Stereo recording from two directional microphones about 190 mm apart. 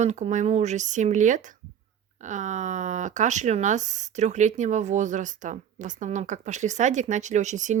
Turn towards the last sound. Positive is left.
turn(degrees=-40)  # may be behind; listen again after turning